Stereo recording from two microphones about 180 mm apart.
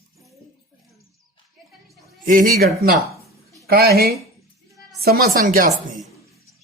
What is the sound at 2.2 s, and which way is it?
Speech, 50° right (ahead or behind).